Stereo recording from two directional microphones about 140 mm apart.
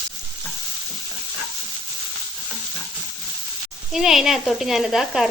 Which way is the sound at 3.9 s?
Centre (ahead or behind).